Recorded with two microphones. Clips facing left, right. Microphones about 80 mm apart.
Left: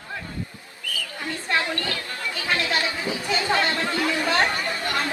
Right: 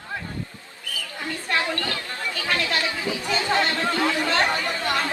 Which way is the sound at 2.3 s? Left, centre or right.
Left.